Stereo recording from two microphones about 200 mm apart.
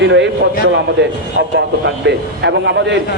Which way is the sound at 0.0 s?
65° right (ahead or behind).